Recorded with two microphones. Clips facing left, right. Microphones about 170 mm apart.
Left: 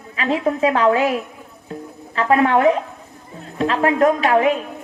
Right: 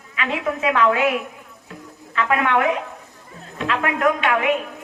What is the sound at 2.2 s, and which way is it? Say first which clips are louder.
Speech: left 4 dB; 35° left (ahead or behind).